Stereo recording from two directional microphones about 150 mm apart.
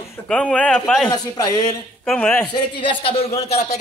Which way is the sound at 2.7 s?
35° left (ahead or behind).